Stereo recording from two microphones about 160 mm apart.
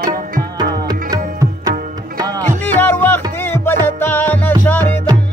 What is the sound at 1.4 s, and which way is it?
Tabla, 25° right (ahead or behind).